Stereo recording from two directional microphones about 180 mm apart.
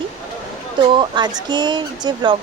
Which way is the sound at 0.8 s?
25° right (ahead or behind).